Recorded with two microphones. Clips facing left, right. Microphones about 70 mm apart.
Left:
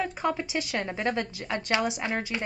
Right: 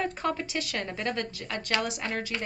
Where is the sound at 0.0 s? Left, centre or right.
Centre.